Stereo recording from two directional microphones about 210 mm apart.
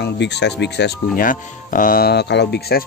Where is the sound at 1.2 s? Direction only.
40° left (ahead or behind).